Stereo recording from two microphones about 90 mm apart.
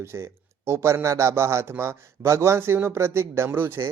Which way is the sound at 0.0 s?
30° right (ahead or behind).